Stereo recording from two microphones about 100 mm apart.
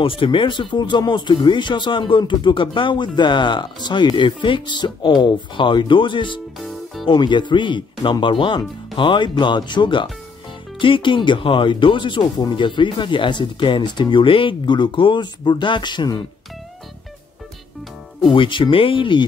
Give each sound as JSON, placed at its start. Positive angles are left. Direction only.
{"t": 0.0, "sound": "speech", "side_deg": 60}
{"t": 18.2, "sound": "speech", "side_deg": 60}